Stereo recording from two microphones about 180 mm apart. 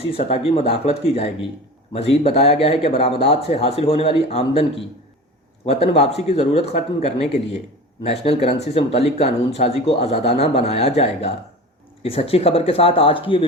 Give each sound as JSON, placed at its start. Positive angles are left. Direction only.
{"t": 0.0, "sound": "speech", "side_deg": 35}